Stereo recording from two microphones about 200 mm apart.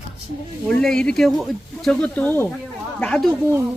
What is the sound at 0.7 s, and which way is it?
Speech, 5° left (ahead or behind).